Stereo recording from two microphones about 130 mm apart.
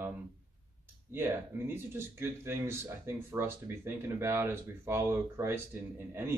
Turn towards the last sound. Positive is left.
turn(degrees=-20)  # may be behind; listen again after turning